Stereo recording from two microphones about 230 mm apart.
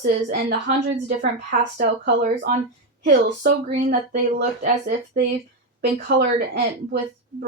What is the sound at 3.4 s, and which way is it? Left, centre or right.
Speech, right.